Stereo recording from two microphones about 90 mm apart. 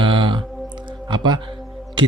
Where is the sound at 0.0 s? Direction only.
65° right (ahead or behind).